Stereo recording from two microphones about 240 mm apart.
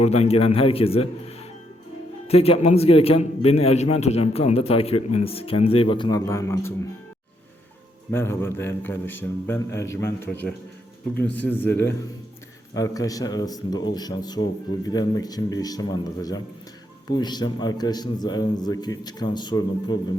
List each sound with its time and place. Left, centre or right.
0.0 s a man's voice: left
2.2 s a man's voice: left
8.1 s a man's voice: centre